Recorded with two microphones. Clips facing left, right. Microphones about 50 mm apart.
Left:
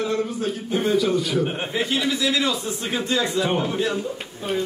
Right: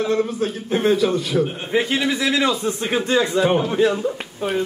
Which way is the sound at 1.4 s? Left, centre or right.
Left.